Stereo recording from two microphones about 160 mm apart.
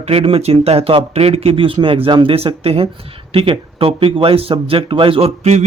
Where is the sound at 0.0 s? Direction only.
35° right (ahead or behind).